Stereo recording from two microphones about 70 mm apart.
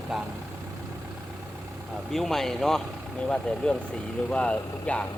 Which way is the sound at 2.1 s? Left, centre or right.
Centre.